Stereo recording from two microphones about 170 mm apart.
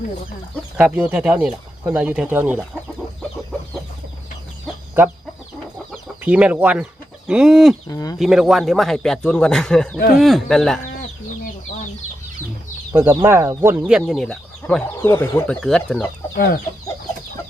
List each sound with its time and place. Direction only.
0.8 s speech: 5° right (ahead or behind)
6.2 s speech: 10° right (ahead or behind)
7.9 s speech: 20° left (ahead or behind)
8.2 s speech: centre (ahead or behind)
12.9 s speech: 15° right (ahead or behind)
13.8 s speech: centre (ahead or behind)
16.3 s chicken: 65° left (ahead or behind)